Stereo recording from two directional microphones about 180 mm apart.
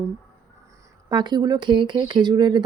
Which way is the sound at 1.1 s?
25° right (ahead or behind).